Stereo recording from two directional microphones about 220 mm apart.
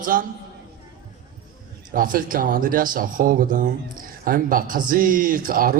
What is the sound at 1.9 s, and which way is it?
Speech, 40° right (ahead or behind).